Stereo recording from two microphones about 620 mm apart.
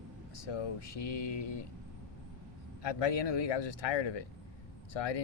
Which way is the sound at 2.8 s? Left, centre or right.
Left.